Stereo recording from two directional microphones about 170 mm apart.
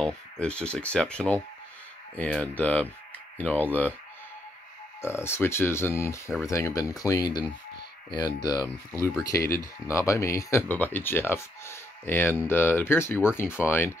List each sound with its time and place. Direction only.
0.0 s speech: 5° left (ahead or behind)
5.0 s speech: 15° left (ahead or behind)